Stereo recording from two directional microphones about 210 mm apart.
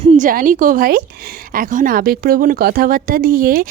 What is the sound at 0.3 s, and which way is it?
A woman's voice, 40° right (ahead or behind).